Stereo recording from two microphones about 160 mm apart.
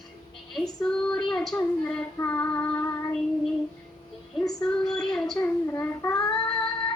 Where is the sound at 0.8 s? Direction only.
5° left (ahead or behind).